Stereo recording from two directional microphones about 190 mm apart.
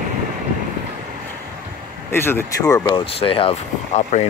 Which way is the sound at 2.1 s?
10° left (ahead or behind).